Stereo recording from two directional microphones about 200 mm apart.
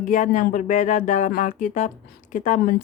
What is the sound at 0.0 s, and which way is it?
Speech, 40° left (ahead or behind).